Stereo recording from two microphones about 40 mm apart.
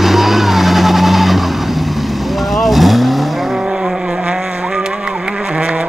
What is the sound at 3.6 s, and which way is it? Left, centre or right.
Vehicle, centre.